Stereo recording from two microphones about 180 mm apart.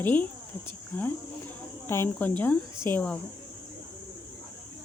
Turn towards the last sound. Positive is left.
turn(degrees=10)  # may be behind; listen again after turning